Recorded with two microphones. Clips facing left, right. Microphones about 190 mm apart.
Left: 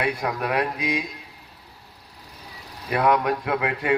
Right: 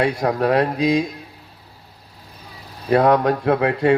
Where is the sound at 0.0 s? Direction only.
35° right (ahead or behind).